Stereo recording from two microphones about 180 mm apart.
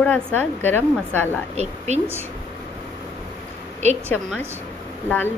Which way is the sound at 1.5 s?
40° right (ahead or behind).